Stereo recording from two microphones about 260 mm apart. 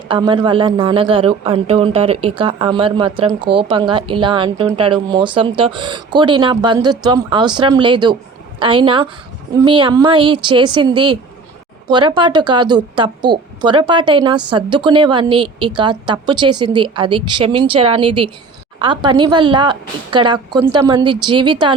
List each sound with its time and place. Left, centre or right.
0.1 s a man's voice: centre